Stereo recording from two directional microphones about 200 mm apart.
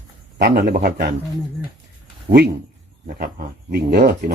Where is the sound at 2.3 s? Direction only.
40° right (ahead or behind).